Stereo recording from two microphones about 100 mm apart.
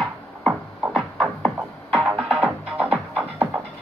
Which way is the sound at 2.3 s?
15° right (ahead or behind).